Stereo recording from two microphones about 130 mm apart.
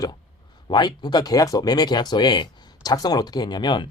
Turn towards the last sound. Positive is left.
turn(degrees=35)  # may be behind; listen again after turning